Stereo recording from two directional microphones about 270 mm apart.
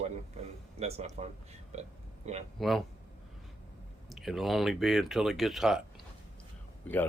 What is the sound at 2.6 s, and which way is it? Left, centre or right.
Speech, centre.